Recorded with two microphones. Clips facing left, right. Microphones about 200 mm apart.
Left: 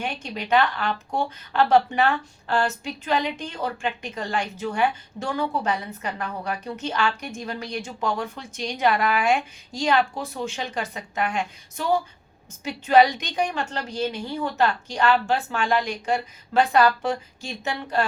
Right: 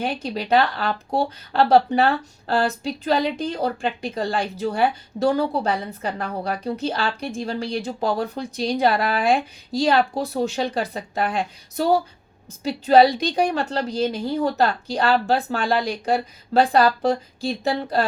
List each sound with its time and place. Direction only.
0.0 s speech: 35° right (ahead or behind)